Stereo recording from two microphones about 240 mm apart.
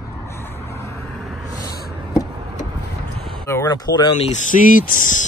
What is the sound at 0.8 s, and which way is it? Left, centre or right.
Vehicle, centre.